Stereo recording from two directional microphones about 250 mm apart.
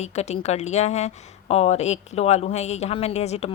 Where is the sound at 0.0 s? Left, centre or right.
Left.